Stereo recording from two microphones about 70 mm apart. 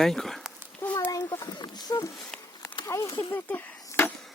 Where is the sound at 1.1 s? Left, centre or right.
Left.